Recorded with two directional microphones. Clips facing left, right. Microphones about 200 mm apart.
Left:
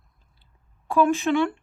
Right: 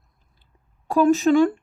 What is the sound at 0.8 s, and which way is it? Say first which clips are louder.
Speech: right 4 dB; 40° right (ahead or behind).